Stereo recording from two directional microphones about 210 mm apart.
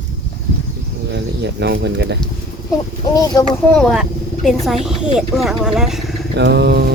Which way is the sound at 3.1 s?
20° left (ahead or behind).